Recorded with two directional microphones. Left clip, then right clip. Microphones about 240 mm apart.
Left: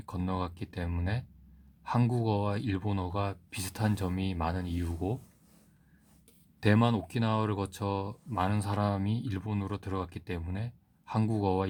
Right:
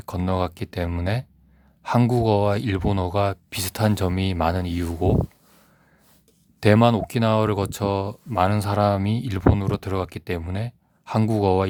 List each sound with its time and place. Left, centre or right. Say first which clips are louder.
0.0 s speech: right 11 dB; right
6.6 s speech: right 11 dB; right